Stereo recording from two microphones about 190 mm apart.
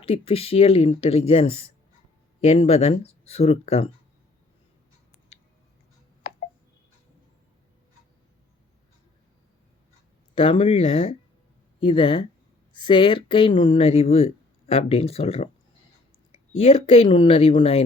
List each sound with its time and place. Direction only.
0.0 s speech: 30° left (ahead or behind)
6.3 s telephone dialing: 45° left (ahead or behind)
10.3 s speech: 30° left (ahead or behind)
16.6 s speech: 30° left (ahead or behind)